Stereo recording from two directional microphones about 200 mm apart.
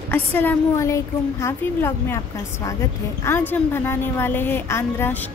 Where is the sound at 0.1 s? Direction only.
10° left (ahead or behind).